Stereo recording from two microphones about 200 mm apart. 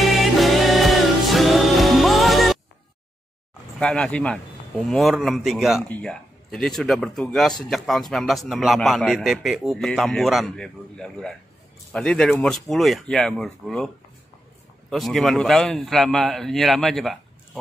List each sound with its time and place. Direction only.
0.2 s music: centre (ahead or behind)
3.8 s speech: 5° left (ahead or behind)
14.9 s speech: centre (ahead or behind)